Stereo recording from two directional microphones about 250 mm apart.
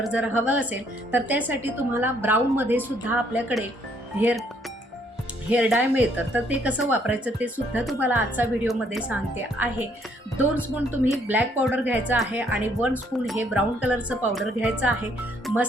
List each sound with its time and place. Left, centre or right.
0.0 s speech: centre
5.5 s speech: centre
11.0 s speech: centre